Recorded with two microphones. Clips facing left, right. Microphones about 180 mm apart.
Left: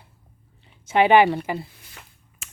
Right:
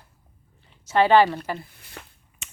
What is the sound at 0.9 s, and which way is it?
Speech, 15° left (ahead or behind).